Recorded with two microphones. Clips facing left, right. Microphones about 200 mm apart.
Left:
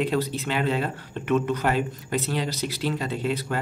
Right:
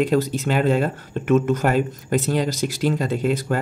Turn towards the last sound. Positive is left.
turn(degrees=-45)  # may be behind; listen again after turning